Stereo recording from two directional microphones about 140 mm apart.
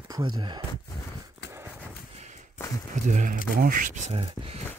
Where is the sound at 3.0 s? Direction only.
65° right (ahead or behind); by 4.6 s 45° right (ahead or behind).